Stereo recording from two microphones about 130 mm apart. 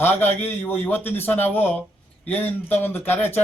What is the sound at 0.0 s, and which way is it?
Speech, 15° left (ahead or behind).